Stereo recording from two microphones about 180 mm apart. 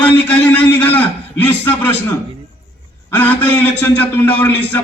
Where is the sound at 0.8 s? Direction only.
10° left (ahead or behind).